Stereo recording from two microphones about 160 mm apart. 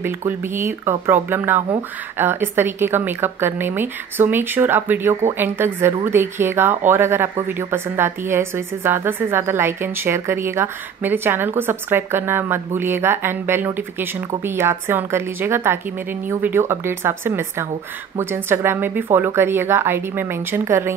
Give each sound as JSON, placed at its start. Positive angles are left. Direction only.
{"t": 0.0, "sound": "a woman's voice", "side_deg": -15}